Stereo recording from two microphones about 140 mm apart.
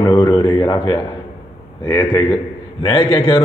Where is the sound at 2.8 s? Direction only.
40° left (ahead or behind).